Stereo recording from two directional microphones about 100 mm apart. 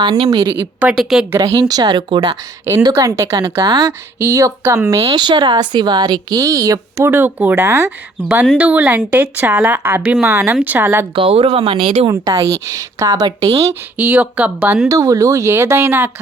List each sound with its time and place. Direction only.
0.3 s a woman's voice: 40° right (ahead or behind)
0.8 s a woman's voice: 10° right (ahead or behind)
1.4 s speech: 35° right (ahead or behind)
2.6 s a woman's voice: 30° right (ahead or behind)
3.7 s speech: 45° right (ahead or behind)
4.2 s a woman's voice: 30° right (ahead or behind)
5.1 s speech: 50° right (ahead or behind); by 7.1 s 35° right (ahead or behind)
7.1 s speech: 20° right (ahead or behind)
8.5 s a woman's voice: 15° right (ahead or behind)
11.1 s speech: 65° right (ahead or behind)
12.0 s a woman's voice: 35° right (ahead or behind)
14.0 s a woman's voice: 15° right (ahead or behind)
14.8 s a woman's voice: 35° right (ahead or behind)